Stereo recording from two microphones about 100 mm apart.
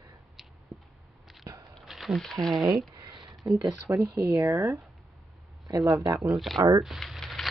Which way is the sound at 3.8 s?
30° right (ahead or behind).